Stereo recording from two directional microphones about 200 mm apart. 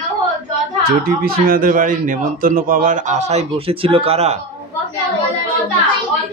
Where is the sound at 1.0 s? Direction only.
50° right (ahead or behind); by 4.4 s 30° right (ahead or behind).